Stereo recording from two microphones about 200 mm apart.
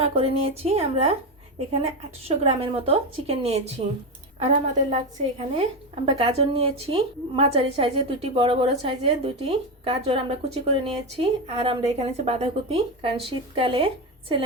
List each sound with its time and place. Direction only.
0.0 s a woman's voice: 30° right (ahead or behind)